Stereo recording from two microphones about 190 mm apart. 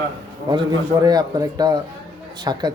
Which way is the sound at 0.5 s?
20° right (ahead or behind).